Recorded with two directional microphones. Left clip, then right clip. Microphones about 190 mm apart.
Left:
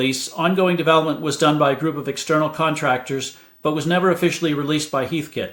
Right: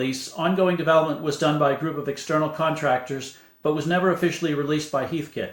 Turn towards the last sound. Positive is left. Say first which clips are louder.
# left 3 dB
turn(degrees=40)  # may be behind; listen again after turning